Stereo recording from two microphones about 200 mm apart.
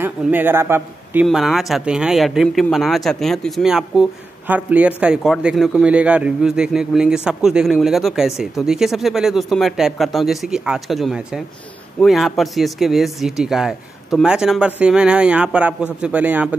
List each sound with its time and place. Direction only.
0.0 s speech: 10° right (ahead or behind)
1.2 s a man's voice: centre (ahead or behind)